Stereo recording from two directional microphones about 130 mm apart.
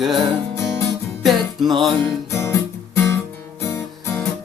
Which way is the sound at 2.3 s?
20° left (ahead or behind).